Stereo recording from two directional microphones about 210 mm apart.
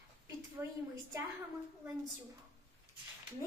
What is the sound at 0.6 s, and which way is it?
Speech, 10° right (ahead or behind).